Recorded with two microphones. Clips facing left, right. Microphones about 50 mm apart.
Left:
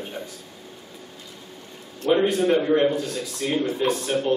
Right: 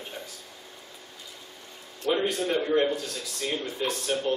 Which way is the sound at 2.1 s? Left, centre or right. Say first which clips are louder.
Left 8 dB; centre.